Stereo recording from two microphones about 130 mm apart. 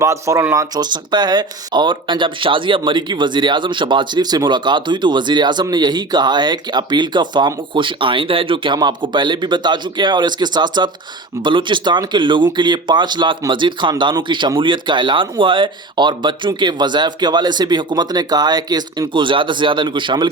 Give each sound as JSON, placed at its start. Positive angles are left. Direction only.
{"t": 0.0, "sound": "speech", "side_deg": -25}